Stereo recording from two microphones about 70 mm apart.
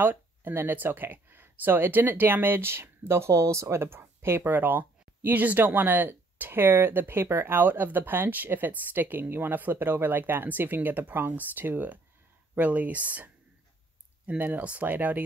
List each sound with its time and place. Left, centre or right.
0.0 s speech: right